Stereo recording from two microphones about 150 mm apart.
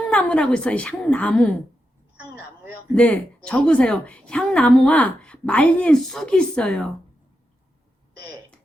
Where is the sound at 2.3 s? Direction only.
10° right (ahead or behind).